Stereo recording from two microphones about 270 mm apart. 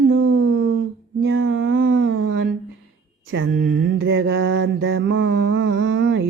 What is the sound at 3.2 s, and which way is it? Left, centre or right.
Mantra, right.